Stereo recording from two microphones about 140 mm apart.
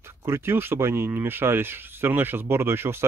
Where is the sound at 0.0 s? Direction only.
20° right (ahead or behind).